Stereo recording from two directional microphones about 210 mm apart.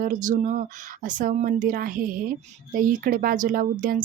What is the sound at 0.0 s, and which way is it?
Speech, 40° right (ahead or behind).